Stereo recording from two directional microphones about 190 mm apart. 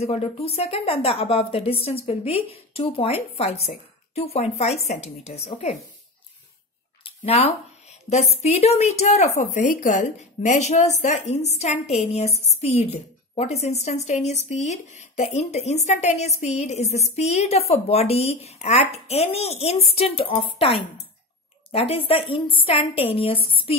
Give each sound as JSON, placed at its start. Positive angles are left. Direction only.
{"t": 0.0, "sound": "a woman's voice", "side_deg": 35}
{"t": 7.1, "sound": "a woman's voice", "side_deg": 30}